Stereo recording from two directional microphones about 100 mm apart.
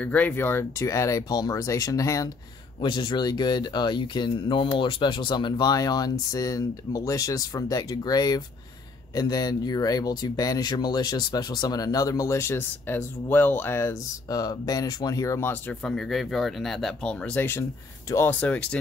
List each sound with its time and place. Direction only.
0.0 s speech: 15° left (ahead or behind); by 2.2 s 35° left (ahead or behind)
2.8 s speech: 50° left (ahead or behind); by 13.9 s 25° left (ahead or behind)
14.3 s speech: 40° left (ahead or behind)
15.8 s speech: 5° left (ahead or behind); by 17.6 s 20° left (ahead or behind)
18.1 s speech: 35° left (ahead or behind)
18.4 s speech: 15° left (ahead or behind)